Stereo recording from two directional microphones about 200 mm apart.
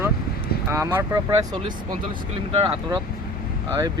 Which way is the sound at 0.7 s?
15° right (ahead or behind).